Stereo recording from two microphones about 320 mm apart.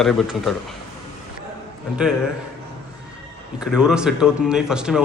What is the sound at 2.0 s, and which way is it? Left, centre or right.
Speech, centre.